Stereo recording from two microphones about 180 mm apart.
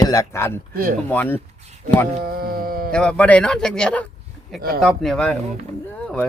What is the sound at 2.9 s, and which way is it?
Speech, 5° left (ahead or behind).